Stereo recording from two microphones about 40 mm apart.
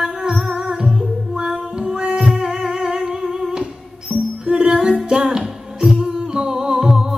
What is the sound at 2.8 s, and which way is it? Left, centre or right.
Humming, centre.